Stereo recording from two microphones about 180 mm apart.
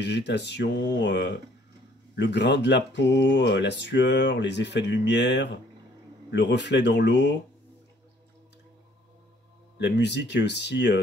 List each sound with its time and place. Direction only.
0.0 s speech: 70° left (ahead or behind)
9.8 s speech: 75° left (ahead or behind)